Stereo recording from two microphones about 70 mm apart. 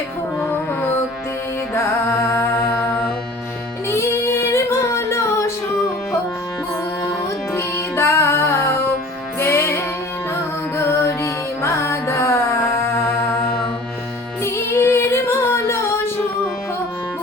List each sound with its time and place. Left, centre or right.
0.5 s music: left
1.7 s music: left
3.8 s singing: left
7.5 s music: left